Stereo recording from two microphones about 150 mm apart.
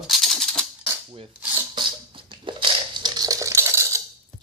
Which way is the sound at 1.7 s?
35° right (ahead or behind).